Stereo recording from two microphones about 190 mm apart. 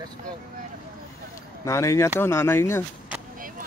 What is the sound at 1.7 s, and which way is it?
Speech, 15° left (ahead or behind).